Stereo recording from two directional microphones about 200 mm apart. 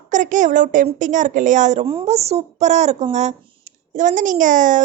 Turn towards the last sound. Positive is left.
turn(degrees=-40)  # may be behind; listen again after turning